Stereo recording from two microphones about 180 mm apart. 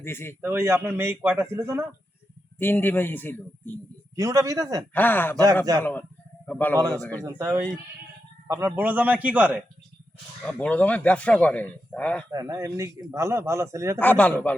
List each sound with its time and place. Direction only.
0.0 s speech: 15° left (ahead or behind)
0.4 s a man's voice: 15° right (ahead or behind)
2.6 s speech: 10° left (ahead or behind)
4.1 s a man's voice: 20° right (ahead or behind)
4.9 s a man's voice: 10° left (ahead or behind)
7.3 s a man's voice: 20° right (ahead or behind)
10.4 s speech: 5° left (ahead or behind)
12.3 s a man's voice: 20° right (ahead or behind)
14.0 s speech: 10° left (ahead or behind)